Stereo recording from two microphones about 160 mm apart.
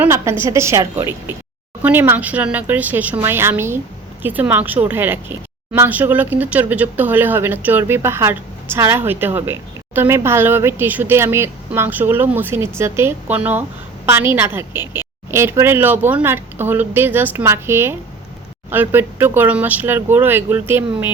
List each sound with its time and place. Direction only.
0.0 s a woman's voice: 15° right (ahead or behind)